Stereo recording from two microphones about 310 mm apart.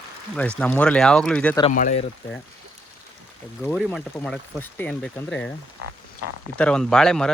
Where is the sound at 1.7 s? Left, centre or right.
Left.